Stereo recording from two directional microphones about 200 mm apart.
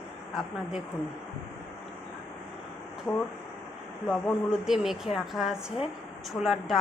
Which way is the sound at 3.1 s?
5° left (ahead or behind).